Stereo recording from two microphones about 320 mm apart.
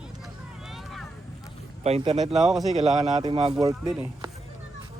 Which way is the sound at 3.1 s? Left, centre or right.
Centre.